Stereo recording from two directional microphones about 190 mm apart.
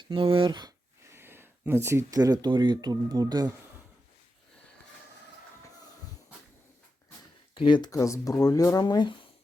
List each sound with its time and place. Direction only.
0.0 s speech: 25° right (ahead or behind)
1.1 s speech: 10° right (ahead or behind)
7.5 s speech: 25° left (ahead or behind)